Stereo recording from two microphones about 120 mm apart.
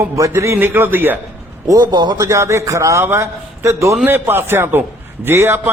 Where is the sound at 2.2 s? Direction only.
25° right (ahead or behind).